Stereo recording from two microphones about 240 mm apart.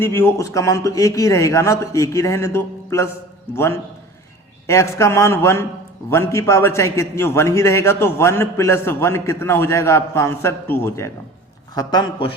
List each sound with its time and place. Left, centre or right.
0.0 s a man's voice: centre